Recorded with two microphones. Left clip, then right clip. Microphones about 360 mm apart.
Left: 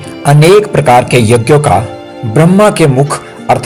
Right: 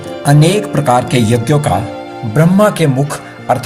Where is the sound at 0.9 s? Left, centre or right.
Right.